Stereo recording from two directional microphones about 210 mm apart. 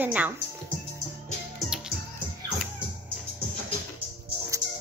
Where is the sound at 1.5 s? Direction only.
5° right (ahead or behind).